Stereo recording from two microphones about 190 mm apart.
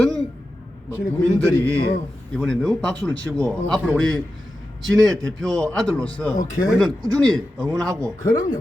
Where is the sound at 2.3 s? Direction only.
Centre (ahead or behind).